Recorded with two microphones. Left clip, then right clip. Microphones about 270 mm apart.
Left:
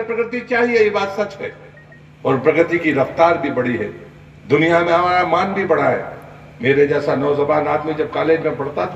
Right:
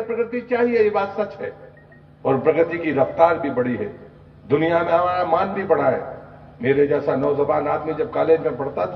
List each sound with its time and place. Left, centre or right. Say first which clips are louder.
0.1 s a man's voice: left 3 dB; left
2.2 s a man's voice: left 3 dB; left